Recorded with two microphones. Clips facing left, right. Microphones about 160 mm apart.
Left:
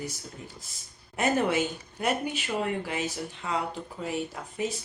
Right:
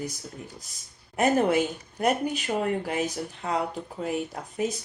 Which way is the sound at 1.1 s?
45° right (ahead or behind).